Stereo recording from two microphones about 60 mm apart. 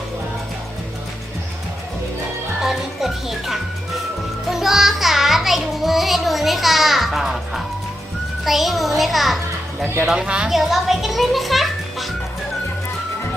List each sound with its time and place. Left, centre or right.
2.6 s music: centre
8.4 s a child's voice: centre
10.2 s a woman's voice: centre
10.5 s a child's voice: centre